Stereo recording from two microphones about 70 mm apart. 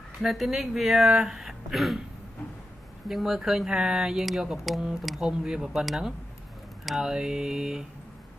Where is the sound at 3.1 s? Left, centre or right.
Centre.